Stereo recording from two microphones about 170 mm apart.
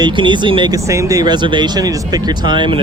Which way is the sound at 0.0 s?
30° right (ahead or behind).